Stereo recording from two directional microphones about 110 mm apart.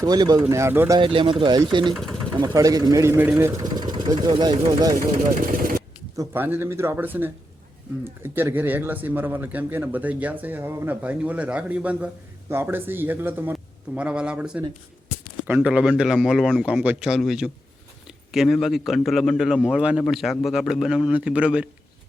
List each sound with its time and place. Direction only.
0.0 s speech: 35° right (ahead or behind)
0.4 s speech: 25° right (ahead or behind)
0.9 s speech: 50° right (ahead or behind)
2.4 s speech: 35° right (ahead or behind)
3.6 s speech: 40° right (ahead or behind)
4.5 s speech: 90° right
6.3 s speech: 20° right (ahead or behind); by 16.6 s centre (ahead or behind)
16.6 s speech: 10° right (ahead or behind)